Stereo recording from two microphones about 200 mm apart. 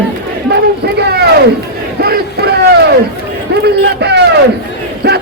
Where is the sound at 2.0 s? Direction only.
50° right (ahead or behind).